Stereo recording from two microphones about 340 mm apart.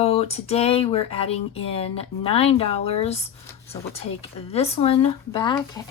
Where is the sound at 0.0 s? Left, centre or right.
Centre.